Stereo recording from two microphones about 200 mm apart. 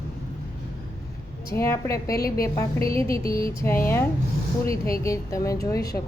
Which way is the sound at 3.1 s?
15° left (ahead or behind).